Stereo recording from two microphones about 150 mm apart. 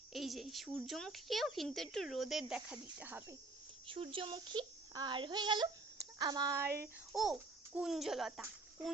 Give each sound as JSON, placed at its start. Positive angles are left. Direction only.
{"t": 0.1, "sound": "a woman's voice", "side_deg": 0}
{"t": 3.8, "sound": "speech", "side_deg": -35}
{"t": 7.1, "sound": "a child's voice", "side_deg": 0}